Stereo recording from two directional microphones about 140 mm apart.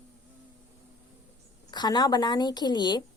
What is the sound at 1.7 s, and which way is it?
A woman's voice, 30° left (ahead or behind).